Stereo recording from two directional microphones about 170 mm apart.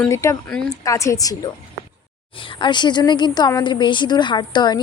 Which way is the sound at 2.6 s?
25° left (ahead or behind).